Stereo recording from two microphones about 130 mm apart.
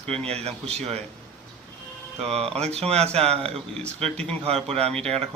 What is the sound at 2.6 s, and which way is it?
Speech, 55° right (ahead or behind).